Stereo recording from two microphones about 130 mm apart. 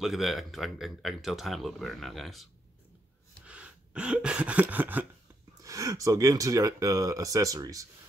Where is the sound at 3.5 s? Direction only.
10° right (ahead or behind).